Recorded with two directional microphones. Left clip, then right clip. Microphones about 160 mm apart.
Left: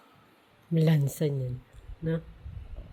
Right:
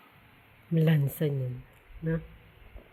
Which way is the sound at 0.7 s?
15° left (ahead or behind).